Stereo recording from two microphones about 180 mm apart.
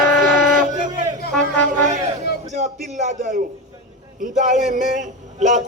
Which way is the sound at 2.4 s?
40° right (ahead or behind).